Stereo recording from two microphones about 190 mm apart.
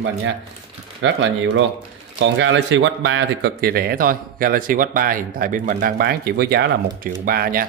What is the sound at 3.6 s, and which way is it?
Speech, 50° right (ahead or behind).